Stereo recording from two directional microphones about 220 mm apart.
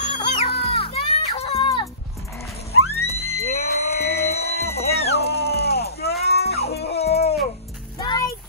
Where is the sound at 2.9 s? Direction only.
30° left (ahead or behind).